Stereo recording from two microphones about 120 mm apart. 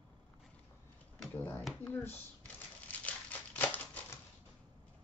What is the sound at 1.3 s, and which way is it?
Speech, 15° left (ahead or behind).